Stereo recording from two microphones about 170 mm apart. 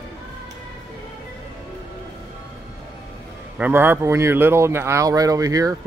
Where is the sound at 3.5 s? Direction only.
10° right (ahead or behind).